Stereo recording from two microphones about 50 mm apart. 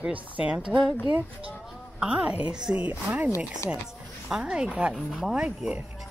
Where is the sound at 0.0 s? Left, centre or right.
Right.